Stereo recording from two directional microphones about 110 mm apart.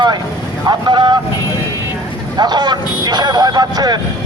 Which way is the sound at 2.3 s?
40° right (ahead or behind).